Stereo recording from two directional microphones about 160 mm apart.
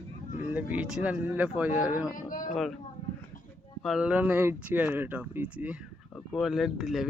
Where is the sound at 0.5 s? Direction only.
5° right (ahead or behind).